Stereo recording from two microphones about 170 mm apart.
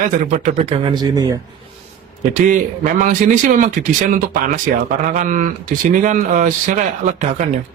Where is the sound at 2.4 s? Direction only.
50° right (ahead or behind).